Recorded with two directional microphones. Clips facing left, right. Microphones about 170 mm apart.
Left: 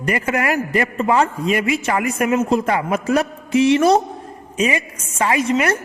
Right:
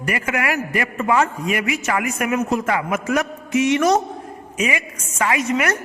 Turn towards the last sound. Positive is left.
turn(degrees=30)  # may be behind; listen again after turning